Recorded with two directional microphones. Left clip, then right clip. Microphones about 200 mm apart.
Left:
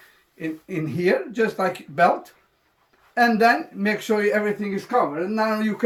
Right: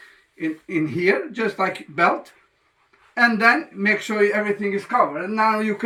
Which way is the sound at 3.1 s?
25° left (ahead or behind).